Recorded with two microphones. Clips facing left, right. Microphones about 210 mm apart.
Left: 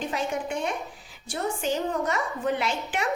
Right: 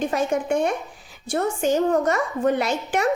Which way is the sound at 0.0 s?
50° right (ahead or behind).